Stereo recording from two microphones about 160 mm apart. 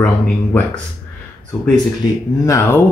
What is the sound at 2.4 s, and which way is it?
Speech, 15° left (ahead or behind).